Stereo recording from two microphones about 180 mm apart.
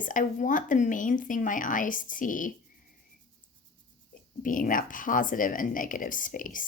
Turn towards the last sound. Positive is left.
turn(degrees=50)  # may be behind; listen again after turning